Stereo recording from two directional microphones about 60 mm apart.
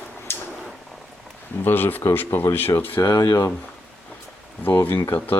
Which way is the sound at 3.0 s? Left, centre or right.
Left.